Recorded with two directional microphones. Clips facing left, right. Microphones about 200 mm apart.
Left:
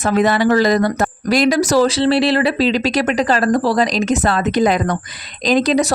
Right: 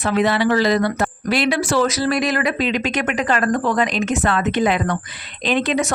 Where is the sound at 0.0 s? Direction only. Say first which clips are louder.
Left 3 dB; 45° left (ahead or behind).